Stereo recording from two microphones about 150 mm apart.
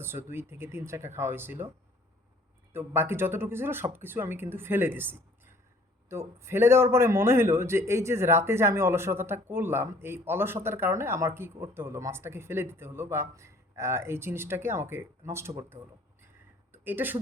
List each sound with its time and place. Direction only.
0.0 s a man's voice: 15° right (ahead or behind)
2.7 s a man's voice: 15° right (ahead or behind)